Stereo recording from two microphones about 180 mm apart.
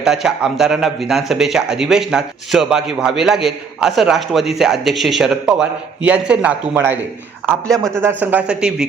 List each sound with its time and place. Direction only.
0.0 s a man's voice: 5° right (ahead or behind)